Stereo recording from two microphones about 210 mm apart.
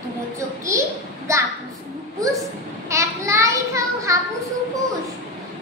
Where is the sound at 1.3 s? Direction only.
15° right (ahead or behind).